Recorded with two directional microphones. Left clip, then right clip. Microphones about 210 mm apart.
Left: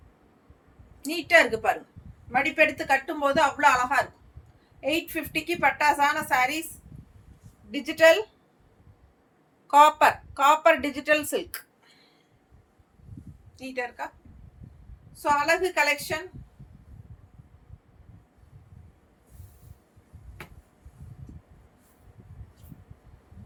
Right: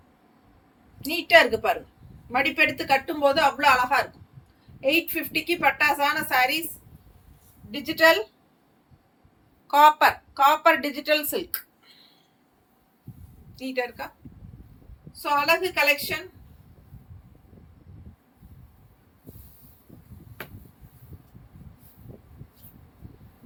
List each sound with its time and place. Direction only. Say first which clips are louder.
1.0 s a woman's voice: right 3 dB; 15° left (ahead or behind)
7.7 s a woman's voice: even; 20° left (ahead or behind)
9.6 s a woman's voice: right 1 dB; 20° left (ahead or behind)
13.6 s a woman's voice: right 4 dB; 15° left (ahead or behind)
15.2 s a woman's voice: right 1 dB; 10° left (ahead or behind)